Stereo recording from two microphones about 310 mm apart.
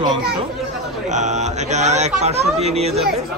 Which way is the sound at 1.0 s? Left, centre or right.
Right.